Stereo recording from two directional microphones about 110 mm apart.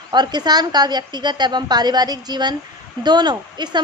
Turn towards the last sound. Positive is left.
turn(degrees=-40)  # may be behind; listen again after turning